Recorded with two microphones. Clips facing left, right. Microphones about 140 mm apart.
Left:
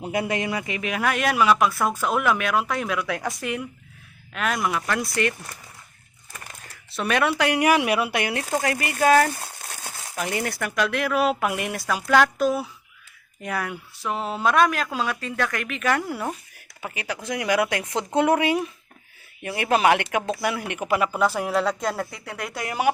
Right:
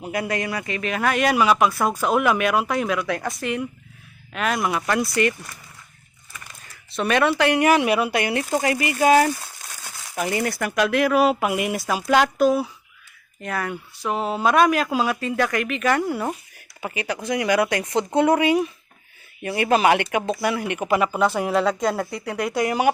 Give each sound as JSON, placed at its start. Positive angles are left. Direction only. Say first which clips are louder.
{"t": 0.0, "sound": "speech", "louder": "even", "side_deg": 20}
{"t": 6.9, "sound": "speech", "louder": "right 3 dB", "side_deg": 5}
{"t": 8.5, "sound": "speech", "louder": "right 2 dB", "side_deg": -10}
{"t": 10.4, "sound": "speech", "louder": "right 4 dB", "side_deg": -5}
{"t": 11.3, "sound": "speech", "louder": "right 3 dB", "side_deg": -15}
{"t": 12.4, "sound": "speech", "louder": "right 4 dB", "side_deg": 0}